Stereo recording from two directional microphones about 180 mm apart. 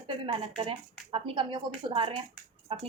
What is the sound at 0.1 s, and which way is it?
Speech, 30° right (ahead or behind).